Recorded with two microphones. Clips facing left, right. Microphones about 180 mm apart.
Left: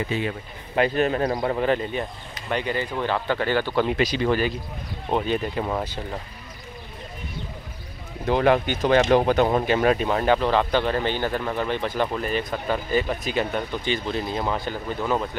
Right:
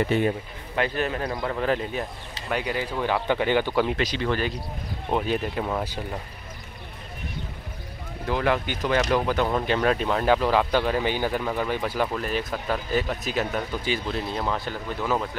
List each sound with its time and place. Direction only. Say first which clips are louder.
0.0 s speech: right 4 dB; 60° right (ahead or behind)
0.7 s speech: left 5 dB; 25° left (ahead or behind)
1.6 s speech: left 2 dB; centre (ahead or behind)
3.8 s speech: left 3 dB; 10° left (ahead or behind)
5.1 s speech: left 1 dB; 5° right (ahead or behind)
8.3 s speech: left 5 dB; 25° left (ahead or behind)
9.7 s speech: left 2 dB; 5° left (ahead or behind)